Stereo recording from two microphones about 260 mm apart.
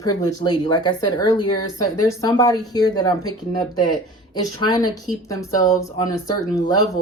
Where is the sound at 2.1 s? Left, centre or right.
Centre.